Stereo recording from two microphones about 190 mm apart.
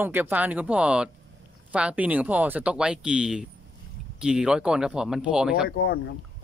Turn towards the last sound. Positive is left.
turn(degrees=55)  # may be behind; listen again after turning